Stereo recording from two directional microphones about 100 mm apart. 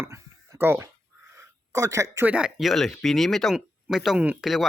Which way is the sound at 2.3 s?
10° right (ahead or behind).